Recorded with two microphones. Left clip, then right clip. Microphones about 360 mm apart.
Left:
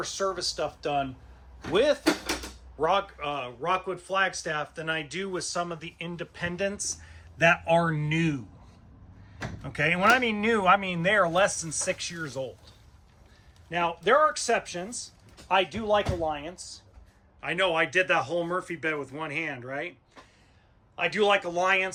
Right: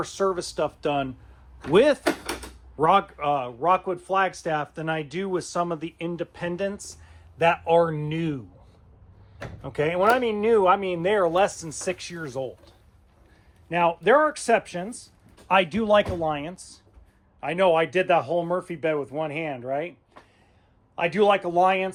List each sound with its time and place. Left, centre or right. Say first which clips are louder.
0.0 s speech: right 4 dB; centre
9.6 s speech: right 1 dB; centre
20.9 s speech: right 3 dB; centre